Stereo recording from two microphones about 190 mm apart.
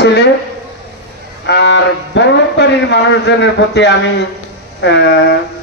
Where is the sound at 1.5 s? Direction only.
65° left (ahead or behind).